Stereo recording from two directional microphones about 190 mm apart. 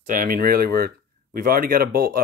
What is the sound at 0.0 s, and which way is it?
Speech, 45° right (ahead or behind).